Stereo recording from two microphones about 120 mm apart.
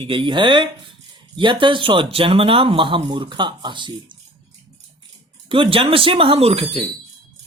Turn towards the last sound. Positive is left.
turn(degrees=-50)  # may be behind; listen again after turning